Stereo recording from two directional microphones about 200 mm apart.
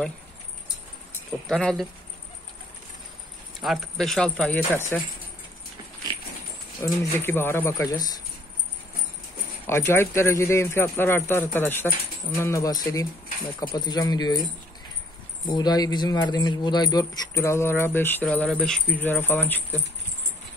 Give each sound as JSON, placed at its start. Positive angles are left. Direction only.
{"t": 1.5, "sound": "speech", "side_deg": 0}
{"t": 3.6, "sound": "speech", "side_deg": 0}
{"t": 6.8, "sound": "speech", "side_deg": 10}
{"t": 9.7, "sound": "speech", "side_deg": 10}
{"t": 15.4, "sound": "speech", "side_deg": 20}